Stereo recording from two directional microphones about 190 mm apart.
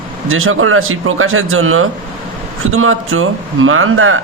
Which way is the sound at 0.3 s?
90° right.